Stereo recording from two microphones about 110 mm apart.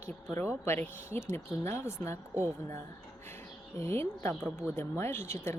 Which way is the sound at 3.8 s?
20° left (ahead or behind).